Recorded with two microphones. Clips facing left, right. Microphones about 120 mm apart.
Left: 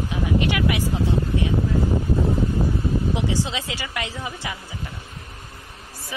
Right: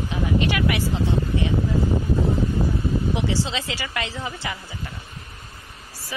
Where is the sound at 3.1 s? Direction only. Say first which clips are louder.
Even; 15° left (ahead or behind).